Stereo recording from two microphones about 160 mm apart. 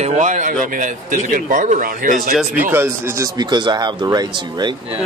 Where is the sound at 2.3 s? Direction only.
5° right (ahead or behind); by 5.0 s 30° right (ahead or behind).